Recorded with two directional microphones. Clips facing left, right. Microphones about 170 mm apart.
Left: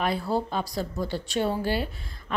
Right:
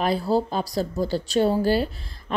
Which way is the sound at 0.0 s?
35° right (ahead or behind).